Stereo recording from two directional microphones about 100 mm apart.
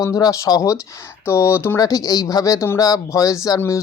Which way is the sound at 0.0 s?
35° left (ahead or behind).